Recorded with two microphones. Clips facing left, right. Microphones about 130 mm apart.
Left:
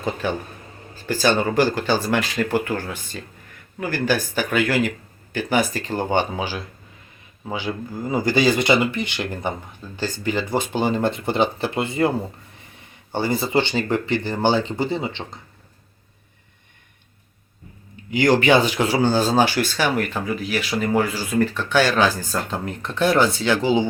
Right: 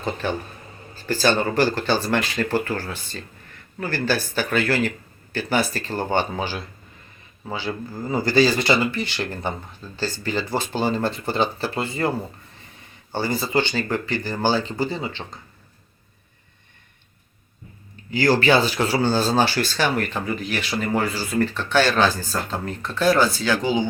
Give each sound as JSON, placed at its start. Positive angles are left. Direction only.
{"t": 0.0, "sound": "speech", "side_deg": 10}
{"t": 18.1, "sound": "speech", "side_deg": 15}